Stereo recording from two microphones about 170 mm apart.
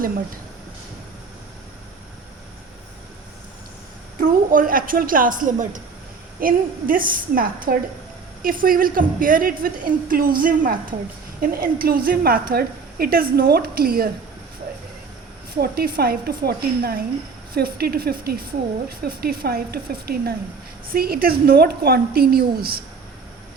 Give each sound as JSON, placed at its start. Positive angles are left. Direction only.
{"t": 4.2, "sound": "a woman's voice", "side_deg": -55}
{"t": 15.6, "sound": "a woman's voice", "side_deg": -65}